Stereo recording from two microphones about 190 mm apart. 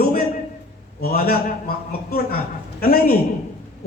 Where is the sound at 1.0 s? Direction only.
50° left (ahead or behind).